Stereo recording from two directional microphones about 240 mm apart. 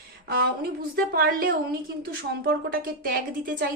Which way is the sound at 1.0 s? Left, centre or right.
Right.